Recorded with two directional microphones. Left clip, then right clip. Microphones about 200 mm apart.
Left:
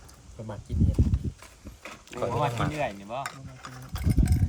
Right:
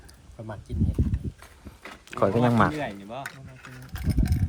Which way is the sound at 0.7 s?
20° right (ahead or behind).